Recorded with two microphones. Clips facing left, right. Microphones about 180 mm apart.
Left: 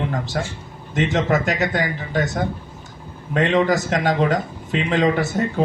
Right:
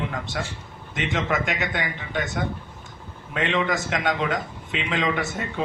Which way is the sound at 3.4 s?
40° left (ahead or behind).